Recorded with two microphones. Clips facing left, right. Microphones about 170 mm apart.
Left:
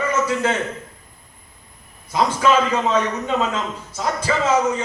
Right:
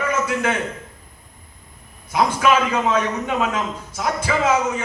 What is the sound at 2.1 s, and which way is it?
A man's voice, 10° right (ahead or behind).